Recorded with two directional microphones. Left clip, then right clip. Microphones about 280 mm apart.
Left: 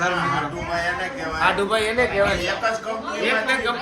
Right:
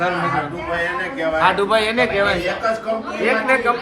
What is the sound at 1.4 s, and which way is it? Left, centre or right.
Speech, right.